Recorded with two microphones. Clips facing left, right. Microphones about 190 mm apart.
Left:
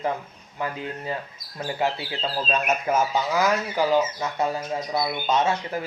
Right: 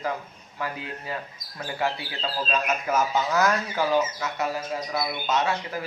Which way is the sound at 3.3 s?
15° left (ahead or behind).